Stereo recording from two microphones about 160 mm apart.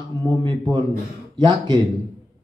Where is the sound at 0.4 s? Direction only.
25° right (ahead or behind).